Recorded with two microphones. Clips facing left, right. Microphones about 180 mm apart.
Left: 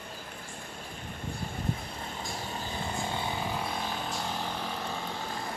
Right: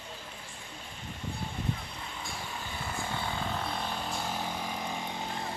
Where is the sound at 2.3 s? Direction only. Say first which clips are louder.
Left 4 dB; 35° left (ahead or behind).